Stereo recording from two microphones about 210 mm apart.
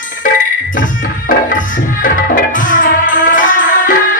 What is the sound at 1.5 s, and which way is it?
Music, 40° left (ahead or behind).